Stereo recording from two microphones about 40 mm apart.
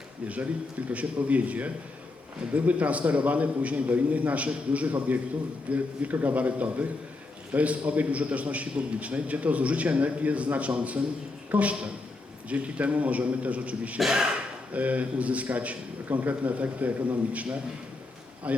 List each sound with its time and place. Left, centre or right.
0.9 s a man's voice: right